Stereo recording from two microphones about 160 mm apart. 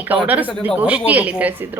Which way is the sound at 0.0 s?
10° right (ahead or behind).